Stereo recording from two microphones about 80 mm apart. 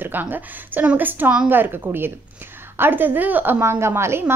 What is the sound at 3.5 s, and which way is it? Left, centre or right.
Speech, right.